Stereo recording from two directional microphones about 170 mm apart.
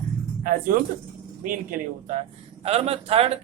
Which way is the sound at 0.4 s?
55° right (ahead or behind).